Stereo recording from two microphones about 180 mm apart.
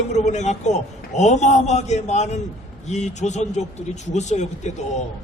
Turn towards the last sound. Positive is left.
turn(degrees=40)  # may be behind; listen again after turning